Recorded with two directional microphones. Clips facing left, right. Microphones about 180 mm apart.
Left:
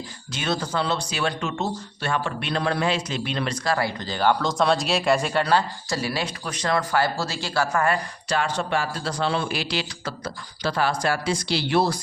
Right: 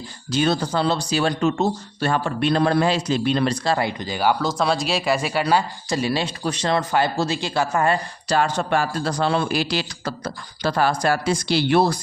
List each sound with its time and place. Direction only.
0.3 s speech: 35° right (ahead or behind); by 6.0 s 10° right (ahead or behind)
6.0 s speech: 25° right (ahead or behind)
8.4 s a man's voice: 45° right (ahead or behind)